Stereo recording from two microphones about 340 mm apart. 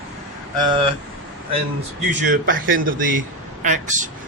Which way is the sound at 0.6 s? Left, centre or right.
Centre.